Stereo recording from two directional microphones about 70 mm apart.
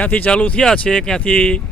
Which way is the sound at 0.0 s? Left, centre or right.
Centre.